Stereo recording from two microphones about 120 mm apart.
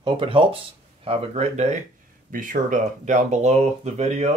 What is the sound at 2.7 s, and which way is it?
Speech, 90° right.